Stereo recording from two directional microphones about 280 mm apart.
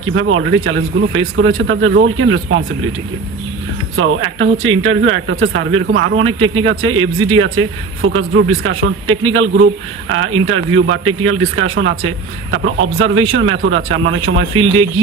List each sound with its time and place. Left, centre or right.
0.0 s speech: right
3.9 s speech: right